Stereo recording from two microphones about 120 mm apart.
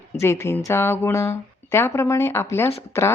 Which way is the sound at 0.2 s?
20° left (ahead or behind).